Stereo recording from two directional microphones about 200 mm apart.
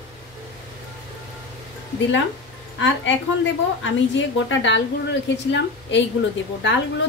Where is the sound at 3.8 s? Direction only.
65° left (ahead or behind).